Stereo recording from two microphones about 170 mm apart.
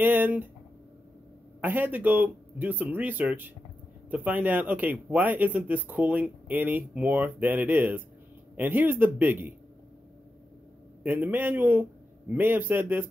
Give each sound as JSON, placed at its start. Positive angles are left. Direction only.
{"t": 0.0, "sound": "speech", "side_deg": -10}
{"t": 1.6, "sound": "speech", "side_deg": -10}
{"t": 11.0, "sound": "a man's voice", "side_deg": -10}